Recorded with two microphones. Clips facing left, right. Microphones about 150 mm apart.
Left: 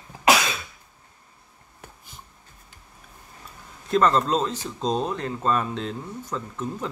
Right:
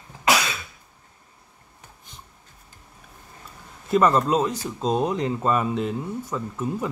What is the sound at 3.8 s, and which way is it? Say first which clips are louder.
Speech: right 1 dB; 10° right (ahead or behind).